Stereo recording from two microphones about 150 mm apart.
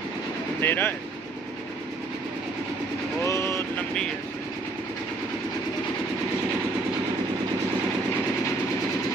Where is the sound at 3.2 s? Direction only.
20° left (ahead or behind).